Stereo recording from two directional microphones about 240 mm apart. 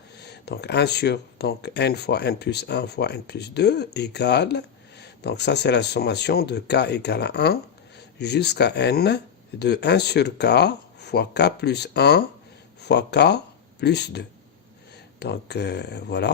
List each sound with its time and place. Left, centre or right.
0.2 s speech: left